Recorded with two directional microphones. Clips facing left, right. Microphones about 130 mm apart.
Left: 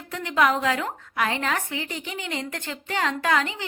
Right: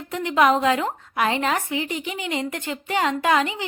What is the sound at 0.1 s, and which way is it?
A woman's voice, 15° right (ahead or behind).